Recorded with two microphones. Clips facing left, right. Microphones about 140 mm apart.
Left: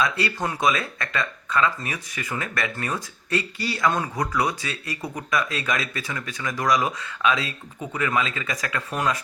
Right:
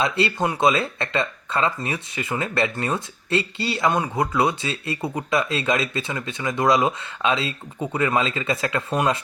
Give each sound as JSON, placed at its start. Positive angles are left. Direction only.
{"t": 0.0, "sound": "speech", "side_deg": -25}